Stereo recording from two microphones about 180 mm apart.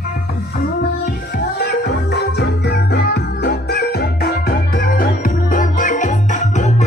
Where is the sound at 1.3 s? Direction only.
65° left (ahead or behind); by 6.8 s 40° left (ahead or behind).